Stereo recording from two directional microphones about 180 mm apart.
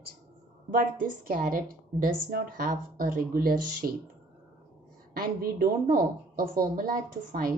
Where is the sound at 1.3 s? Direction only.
55° right (ahead or behind).